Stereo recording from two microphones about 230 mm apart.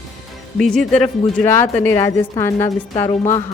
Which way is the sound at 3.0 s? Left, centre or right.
Left.